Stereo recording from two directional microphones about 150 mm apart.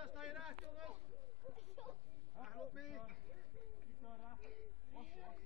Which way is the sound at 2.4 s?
Centre (ahead or behind).